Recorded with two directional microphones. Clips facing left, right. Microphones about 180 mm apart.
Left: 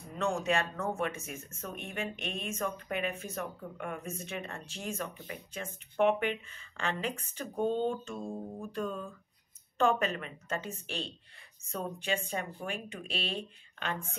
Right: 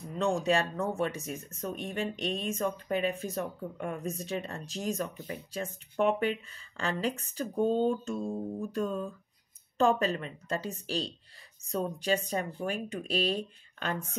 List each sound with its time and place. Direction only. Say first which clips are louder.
0.2 s speech: right 3 dB; 35° right (ahead or behind)